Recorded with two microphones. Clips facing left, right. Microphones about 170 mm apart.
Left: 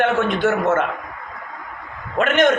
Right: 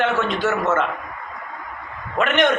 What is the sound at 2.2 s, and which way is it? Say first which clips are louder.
Speech: left 2 dB; 45° left (ahead or behind).